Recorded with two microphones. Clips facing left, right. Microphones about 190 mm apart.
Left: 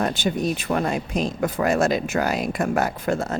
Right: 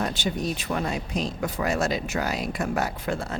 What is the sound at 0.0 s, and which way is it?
Speech, 55° left (ahead or behind).